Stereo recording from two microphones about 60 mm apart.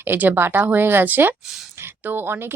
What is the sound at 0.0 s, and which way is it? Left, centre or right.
Speech, right.